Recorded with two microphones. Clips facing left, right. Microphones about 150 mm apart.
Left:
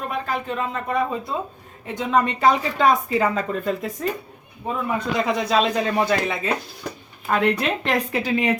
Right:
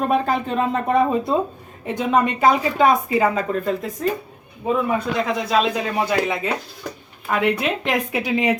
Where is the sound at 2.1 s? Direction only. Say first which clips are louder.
Right 1 dB; 10° right (ahead or behind).